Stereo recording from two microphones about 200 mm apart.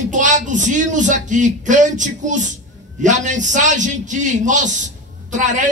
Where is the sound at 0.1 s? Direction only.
40° right (ahead or behind).